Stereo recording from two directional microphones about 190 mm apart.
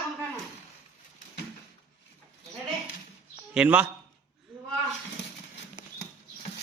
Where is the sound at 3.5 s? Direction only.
5° right (ahead or behind).